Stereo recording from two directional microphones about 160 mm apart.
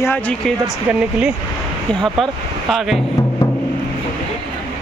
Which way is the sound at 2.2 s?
Centre (ahead or behind).